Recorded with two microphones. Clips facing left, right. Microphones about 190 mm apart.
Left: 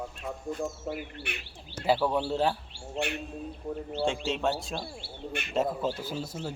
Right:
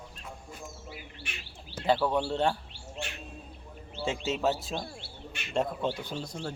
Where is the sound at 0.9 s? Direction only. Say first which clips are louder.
Left 9 dB; 60° left (ahead or behind).